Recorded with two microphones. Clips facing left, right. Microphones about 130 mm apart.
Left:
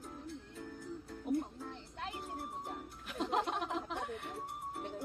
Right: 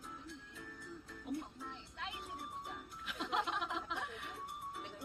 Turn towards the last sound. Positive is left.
turn(degrees=45)  # may be behind; listen again after turning